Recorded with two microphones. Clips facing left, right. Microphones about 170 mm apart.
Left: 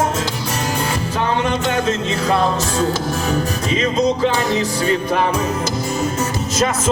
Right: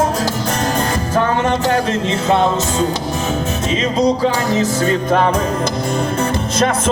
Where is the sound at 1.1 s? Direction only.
45° right (ahead or behind).